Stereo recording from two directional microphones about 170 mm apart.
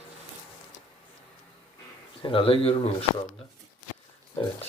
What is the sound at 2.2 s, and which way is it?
Speech, 30° left (ahead or behind).